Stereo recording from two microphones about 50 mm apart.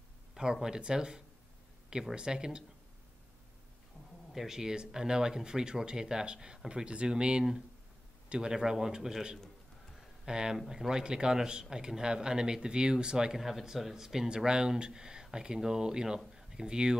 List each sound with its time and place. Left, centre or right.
0.3 s speech: centre
4.3 s speech: centre
13.4 s speech: centre
16.3 s a sound: centre